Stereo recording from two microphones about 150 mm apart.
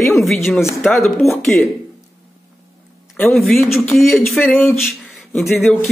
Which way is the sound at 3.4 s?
Centre (ahead or behind).